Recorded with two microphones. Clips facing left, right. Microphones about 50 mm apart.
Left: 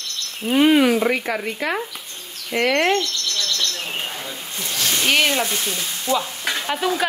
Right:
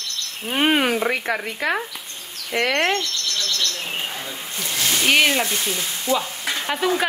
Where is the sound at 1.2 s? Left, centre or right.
Right.